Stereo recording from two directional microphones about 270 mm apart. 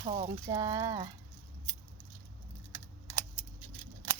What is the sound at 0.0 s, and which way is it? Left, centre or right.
Speech, right.